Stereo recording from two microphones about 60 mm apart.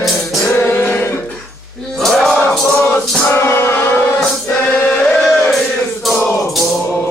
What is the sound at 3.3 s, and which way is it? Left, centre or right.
Music, left.